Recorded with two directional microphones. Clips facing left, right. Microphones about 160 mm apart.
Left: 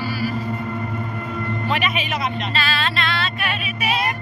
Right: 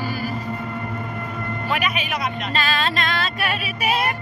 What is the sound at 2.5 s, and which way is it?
Music, 40° right (ahead or behind).